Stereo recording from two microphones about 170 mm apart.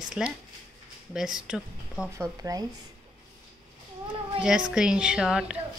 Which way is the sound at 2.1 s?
20° right (ahead or behind).